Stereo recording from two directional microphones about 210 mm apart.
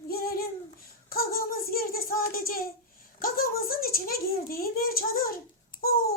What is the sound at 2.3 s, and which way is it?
A child's voice, 45° left (ahead or behind).